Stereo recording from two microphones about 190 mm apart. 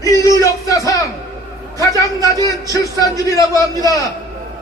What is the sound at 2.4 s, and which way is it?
A man's voice, 15° left (ahead or behind).